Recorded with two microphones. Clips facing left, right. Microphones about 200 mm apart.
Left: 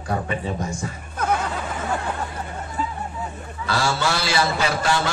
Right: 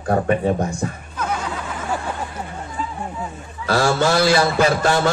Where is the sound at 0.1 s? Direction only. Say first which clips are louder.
Right 8 dB; 50° right (ahead or behind).